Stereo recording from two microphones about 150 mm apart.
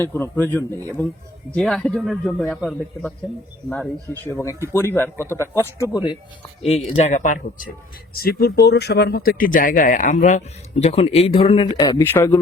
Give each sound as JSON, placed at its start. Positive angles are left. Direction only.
{"t": 0.0, "sound": "speech", "side_deg": 15}
{"t": 1.5, "sound": "speech", "side_deg": 5}
{"t": 5.1, "sound": "speech", "side_deg": -15}
{"t": 5.4, "sound": "speech", "side_deg": 15}
{"t": 6.9, "sound": "speech", "side_deg": 50}
{"t": 8.1, "sound": "speech", "side_deg": 90}
{"t": 11.8, "sound": "speech", "side_deg": 25}
{"t": 12.0, "sound": "speech", "side_deg": 15}